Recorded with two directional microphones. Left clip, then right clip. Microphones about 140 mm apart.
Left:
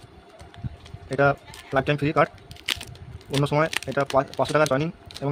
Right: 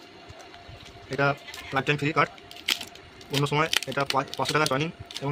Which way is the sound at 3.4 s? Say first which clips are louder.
Left 2 dB; 90° left.